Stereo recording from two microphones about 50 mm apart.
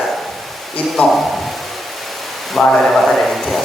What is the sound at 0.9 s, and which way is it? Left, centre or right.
Speech, centre.